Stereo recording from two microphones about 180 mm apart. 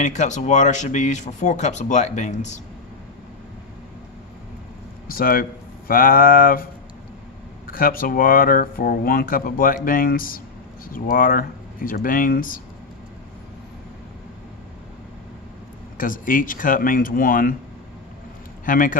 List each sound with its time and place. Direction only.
0.0 s speech: 40° left (ahead or behind)
5.0 s speech: 55° left (ahead or behind)
7.7 s speech: 55° left (ahead or behind)
16.0 s speech: 50° left (ahead or behind)
18.6 s speech: 50° left (ahead or behind)